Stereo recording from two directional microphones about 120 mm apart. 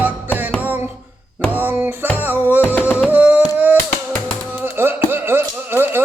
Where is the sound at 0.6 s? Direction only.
15° right (ahead or behind).